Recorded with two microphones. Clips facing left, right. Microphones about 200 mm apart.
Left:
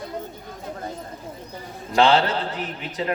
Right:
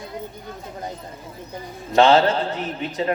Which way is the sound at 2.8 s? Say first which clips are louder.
Right 4 dB; 30° right (ahead or behind).